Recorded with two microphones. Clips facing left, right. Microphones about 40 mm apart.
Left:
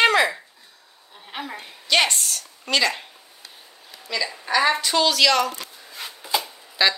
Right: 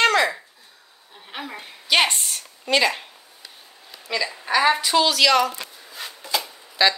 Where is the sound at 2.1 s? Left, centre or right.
Right.